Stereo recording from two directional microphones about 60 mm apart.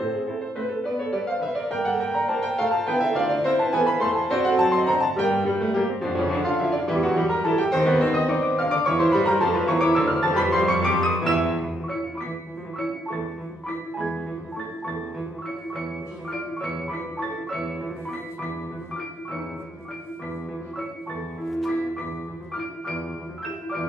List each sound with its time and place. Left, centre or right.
0.3 s music: centre
13.9 s music: centre
17.5 s music: centre
21.5 s music: centre